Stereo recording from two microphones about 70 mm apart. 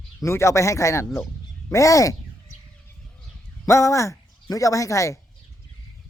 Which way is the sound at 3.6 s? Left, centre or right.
Left.